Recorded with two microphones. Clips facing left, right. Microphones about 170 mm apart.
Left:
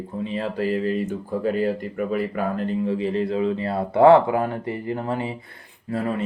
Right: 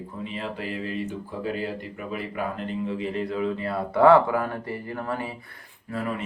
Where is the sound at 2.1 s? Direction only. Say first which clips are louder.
Left 4 dB; 35° left (ahead or behind).